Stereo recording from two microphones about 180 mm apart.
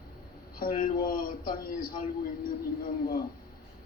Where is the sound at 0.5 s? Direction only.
55° left (ahead or behind).